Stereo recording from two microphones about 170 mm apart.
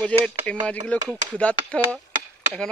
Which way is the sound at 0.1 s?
5° left (ahead or behind).